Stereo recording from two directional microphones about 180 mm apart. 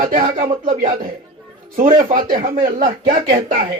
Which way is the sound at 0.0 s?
40° right (ahead or behind).